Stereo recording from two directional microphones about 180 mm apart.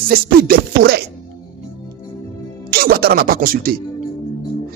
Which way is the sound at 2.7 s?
55° right (ahead or behind).